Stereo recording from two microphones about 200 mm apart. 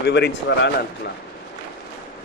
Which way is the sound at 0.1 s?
60° left (ahead or behind).